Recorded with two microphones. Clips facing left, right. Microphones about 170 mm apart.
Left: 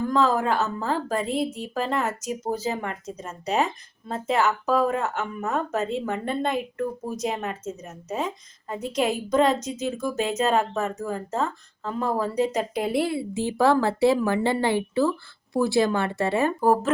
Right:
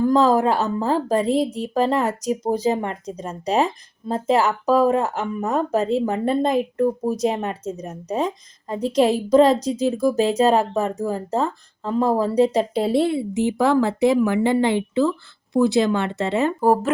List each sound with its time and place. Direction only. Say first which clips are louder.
0.1 s a woman's voice: right 2 dB; 35° right (ahead or behind); by 16.9 s 15° right (ahead or behind)